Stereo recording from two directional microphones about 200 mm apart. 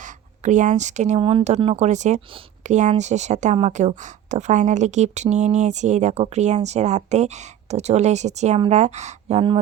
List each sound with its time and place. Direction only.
0.0 s speech: 40° right (ahead or behind)